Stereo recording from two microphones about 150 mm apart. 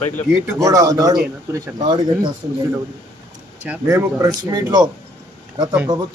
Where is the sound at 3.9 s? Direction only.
20° right (ahead or behind).